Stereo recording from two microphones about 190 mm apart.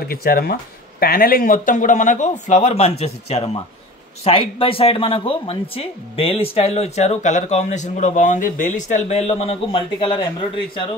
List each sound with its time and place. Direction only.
0.1 s speech: 50° left (ahead or behind); by 10.2 s 25° left (ahead or behind)